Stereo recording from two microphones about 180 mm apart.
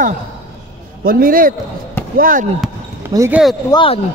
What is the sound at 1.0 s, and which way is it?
A man's voice, 50° right (ahead or behind).